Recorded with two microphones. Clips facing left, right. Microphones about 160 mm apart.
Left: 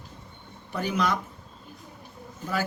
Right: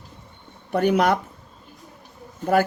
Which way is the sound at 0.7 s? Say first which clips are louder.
Right 8 dB; 60° right (ahead or behind).